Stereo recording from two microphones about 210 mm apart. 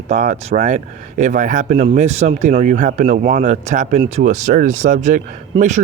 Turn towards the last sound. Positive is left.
turn(degrees=-35)  # may be behind; listen again after turning